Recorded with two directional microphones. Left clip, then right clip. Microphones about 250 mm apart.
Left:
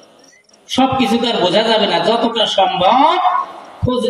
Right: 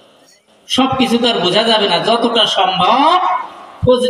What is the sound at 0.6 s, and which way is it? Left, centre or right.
A man's voice, right.